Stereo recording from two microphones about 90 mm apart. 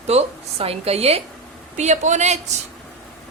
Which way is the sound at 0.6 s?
90° right.